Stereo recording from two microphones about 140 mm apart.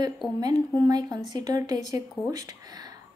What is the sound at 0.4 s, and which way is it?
A woman's voice, 25° right (ahead or behind).